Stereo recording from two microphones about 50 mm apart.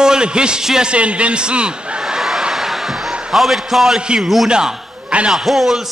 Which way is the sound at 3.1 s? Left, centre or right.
Centre.